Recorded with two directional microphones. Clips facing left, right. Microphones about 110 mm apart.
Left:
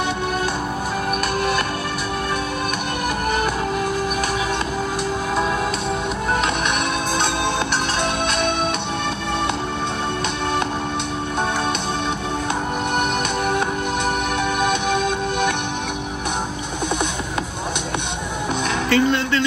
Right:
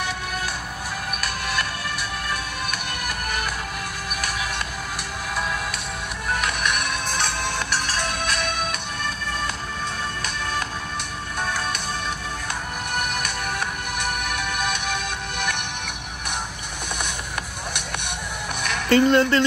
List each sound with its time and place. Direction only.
6.3 s music: 25° left (ahead or behind)
13.5 s music: 20° left (ahead or behind)
18.9 s speech: 40° right (ahead or behind)